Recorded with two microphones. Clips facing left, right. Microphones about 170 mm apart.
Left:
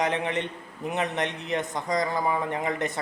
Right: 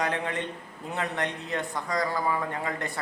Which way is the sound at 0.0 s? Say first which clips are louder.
Left 3 dB; 20° left (ahead or behind).